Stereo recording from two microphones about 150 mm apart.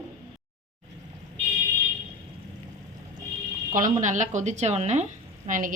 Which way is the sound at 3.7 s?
60° right (ahead or behind).